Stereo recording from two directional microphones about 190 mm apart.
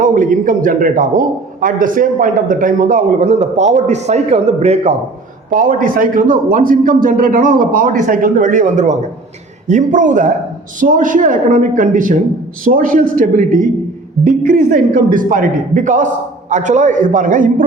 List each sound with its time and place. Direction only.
0.0 s a man's voice: 45° right (ahead or behind)
5.5 s a man's voice: 45° right (ahead or behind)